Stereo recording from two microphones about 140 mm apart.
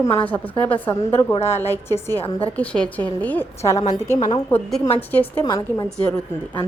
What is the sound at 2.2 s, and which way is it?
Speech, 40° left (ahead or behind).